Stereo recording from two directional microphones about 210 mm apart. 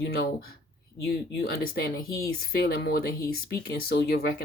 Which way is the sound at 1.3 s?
50° left (ahead or behind).